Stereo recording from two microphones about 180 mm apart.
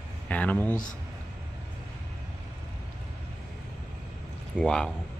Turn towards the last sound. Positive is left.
turn(degrees=5)  # may be behind; listen again after turning